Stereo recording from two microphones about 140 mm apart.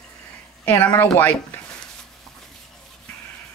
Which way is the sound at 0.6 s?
10° left (ahead or behind).